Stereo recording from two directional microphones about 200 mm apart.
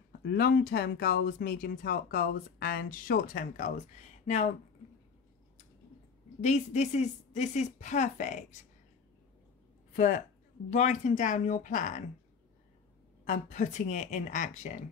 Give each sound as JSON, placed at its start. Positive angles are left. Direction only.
{"t": 0.2, "sound": "speech", "side_deg": 50}
{"t": 6.4, "sound": "a woman's voice", "side_deg": 35}
{"t": 10.7, "sound": "a woman's voice", "side_deg": 35}
{"t": 13.2, "sound": "a woman's voice", "side_deg": 40}